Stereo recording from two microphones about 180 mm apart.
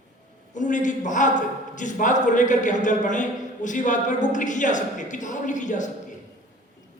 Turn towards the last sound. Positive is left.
turn(degrees=45)  # may be behind; listen again after turning